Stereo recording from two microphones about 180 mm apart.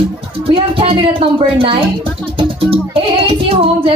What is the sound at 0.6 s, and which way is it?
Speech, 30° right (ahead or behind).